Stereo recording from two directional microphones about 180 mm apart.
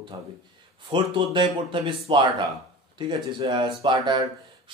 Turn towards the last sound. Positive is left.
turn(degrees=-25)  # may be behind; listen again after turning